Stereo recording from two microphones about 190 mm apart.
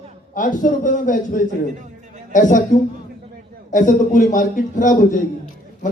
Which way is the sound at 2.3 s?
40° left (ahead or behind).